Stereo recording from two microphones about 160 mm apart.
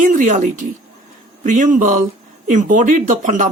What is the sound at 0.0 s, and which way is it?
Speech, 55° right (ahead or behind).